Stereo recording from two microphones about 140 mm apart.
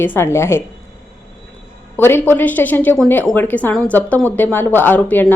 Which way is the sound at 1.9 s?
15° left (ahead or behind).